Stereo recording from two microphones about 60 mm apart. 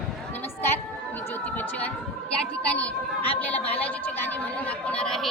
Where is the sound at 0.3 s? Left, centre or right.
Left.